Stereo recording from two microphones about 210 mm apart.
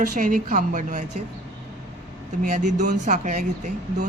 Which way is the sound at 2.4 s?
35° right (ahead or behind).